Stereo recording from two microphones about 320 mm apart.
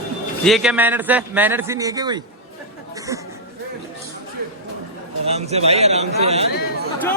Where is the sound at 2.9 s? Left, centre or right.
Centre.